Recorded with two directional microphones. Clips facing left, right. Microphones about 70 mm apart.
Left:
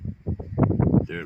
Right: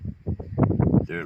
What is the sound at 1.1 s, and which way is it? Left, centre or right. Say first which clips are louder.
Speech: right 2 dB; right.